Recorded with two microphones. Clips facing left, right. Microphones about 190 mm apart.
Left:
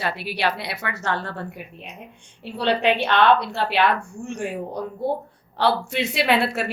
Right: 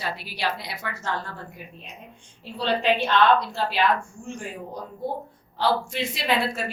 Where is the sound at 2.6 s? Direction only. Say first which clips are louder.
Left 2 dB; 65° left (ahead or behind).